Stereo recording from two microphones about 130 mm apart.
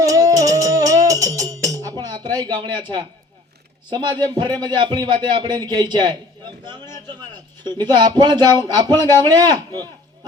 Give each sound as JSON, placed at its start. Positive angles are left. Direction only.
{"t": 0.0, "sound": "music", "side_deg": -25}
{"t": 3.8, "sound": "a man's voice", "side_deg": -35}